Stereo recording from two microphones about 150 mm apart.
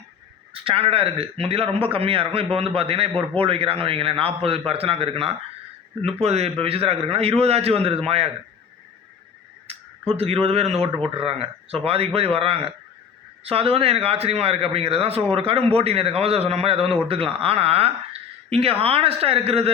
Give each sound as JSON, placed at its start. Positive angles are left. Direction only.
{"t": 0.5, "sound": "a man's voice", "side_deg": -40}
{"t": 9.7, "sound": "a sound", "side_deg": -40}
{"t": 10.1, "sound": "a man's voice", "side_deg": -40}